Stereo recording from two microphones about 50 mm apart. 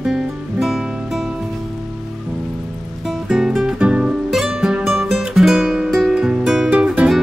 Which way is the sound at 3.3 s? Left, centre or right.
Centre.